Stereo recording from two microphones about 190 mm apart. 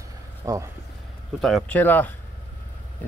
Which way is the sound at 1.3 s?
Centre (ahead or behind).